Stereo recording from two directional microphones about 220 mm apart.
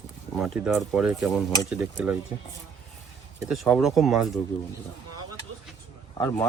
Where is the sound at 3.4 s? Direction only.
Centre (ahead or behind).